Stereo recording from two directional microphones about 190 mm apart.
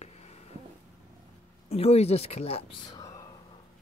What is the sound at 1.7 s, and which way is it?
Speech, 35° left (ahead or behind).